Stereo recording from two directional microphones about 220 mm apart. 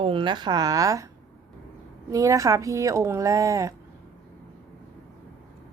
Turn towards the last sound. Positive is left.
turn(degrees=-15)  # may be behind; listen again after turning